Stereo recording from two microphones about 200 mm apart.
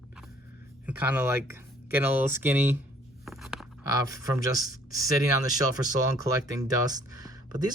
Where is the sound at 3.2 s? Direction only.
Centre (ahead or behind).